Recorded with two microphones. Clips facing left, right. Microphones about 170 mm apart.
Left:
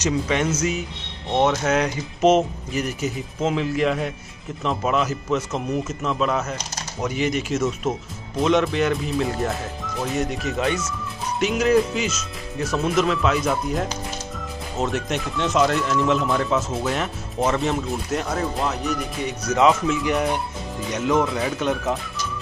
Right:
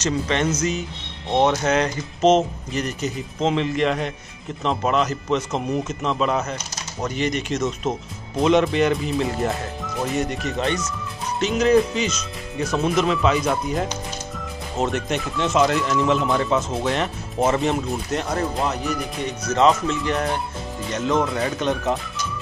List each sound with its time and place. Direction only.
0.0 s speech: 10° left (ahead or behind)
19.2 s speech: 10° left (ahead or behind)